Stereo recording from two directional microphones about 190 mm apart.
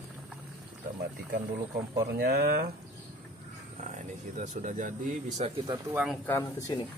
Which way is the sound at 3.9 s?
40° right (ahead or behind).